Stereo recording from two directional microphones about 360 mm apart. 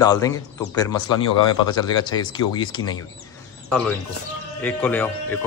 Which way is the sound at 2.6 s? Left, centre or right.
Centre.